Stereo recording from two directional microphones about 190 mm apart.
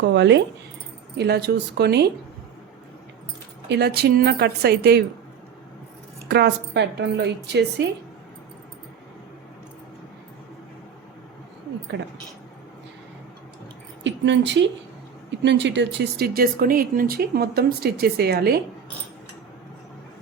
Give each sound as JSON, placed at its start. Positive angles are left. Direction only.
{"t": 0.1, "sound": "speech", "side_deg": -65}
{"t": 3.7, "sound": "speech", "side_deg": -60}
{"t": 6.2, "sound": "speech", "side_deg": -60}
{"t": 14.0, "sound": "a sound", "side_deg": -70}
{"t": 15.3, "sound": "speech", "side_deg": -70}